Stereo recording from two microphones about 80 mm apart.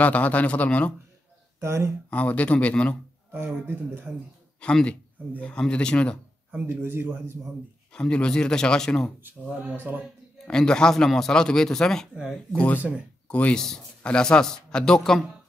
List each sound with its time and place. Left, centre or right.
0.0 s speech: centre
1.6 s speech: right
2.0 s speech: centre
3.4 s a man's voice: right
4.6 s speech: centre
6.5 s a man's voice: right
7.9 s speech: centre
9.2 s a man's voice: centre
10.4 s speech: centre
12.5 s speech: centre